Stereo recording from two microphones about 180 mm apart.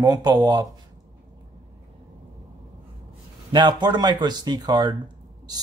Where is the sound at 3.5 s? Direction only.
25° right (ahead or behind).